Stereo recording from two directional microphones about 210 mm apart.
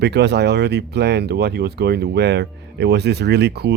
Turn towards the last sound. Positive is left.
turn(degrees=-50)  # may be behind; listen again after turning